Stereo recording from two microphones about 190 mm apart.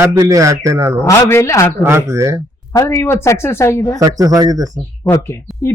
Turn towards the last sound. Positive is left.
turn(degrees=15)  # may be behind; listen again after turning